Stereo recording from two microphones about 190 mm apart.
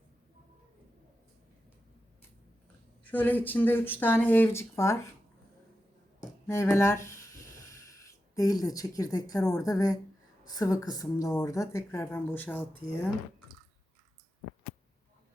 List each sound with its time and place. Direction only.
3.0 s a woman's voice: 10° left (ahead or behind)
6.5 s a sound: 15° left (ahead or behind)
9.5 s a woman's voice: 15° left (ahead or behind)